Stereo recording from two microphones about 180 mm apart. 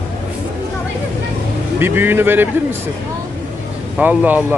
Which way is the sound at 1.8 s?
10° right (ahead or behind).